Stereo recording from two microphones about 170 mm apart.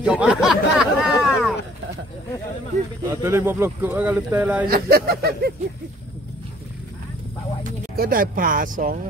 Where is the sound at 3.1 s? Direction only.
15° right (ahead or behind).